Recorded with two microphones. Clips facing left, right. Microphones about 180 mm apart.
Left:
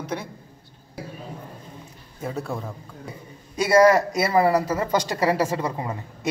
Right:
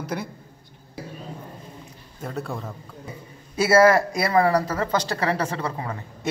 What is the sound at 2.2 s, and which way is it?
Speech, centre (ahead or behind).